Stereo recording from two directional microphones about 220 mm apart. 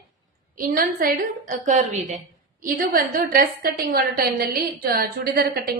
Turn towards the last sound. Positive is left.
turn(degrees=-45)  # may be behind; listen again after turning